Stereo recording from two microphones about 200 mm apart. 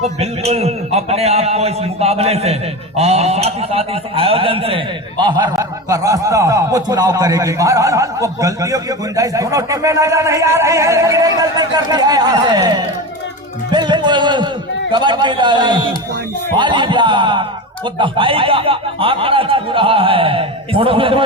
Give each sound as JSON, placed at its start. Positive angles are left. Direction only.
{"t": 0.2, "sound": "a man's voice", "side_deg": -30}